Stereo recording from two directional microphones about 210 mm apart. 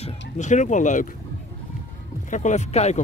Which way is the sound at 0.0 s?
35° left (ahead or behind).